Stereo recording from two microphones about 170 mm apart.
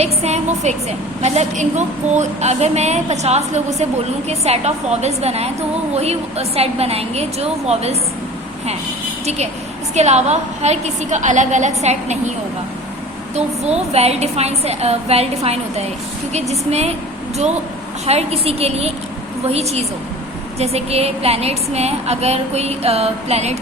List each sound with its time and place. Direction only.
0.0 s a woman's voice: 40° right (ahead or behind)
9.9 s a woman's voice: 40° right (ahead or behind)
13.3 s a woman's voice: 40° right (ahead or behind)
18.0 s a woman's voice: 40° right (ahead or behind)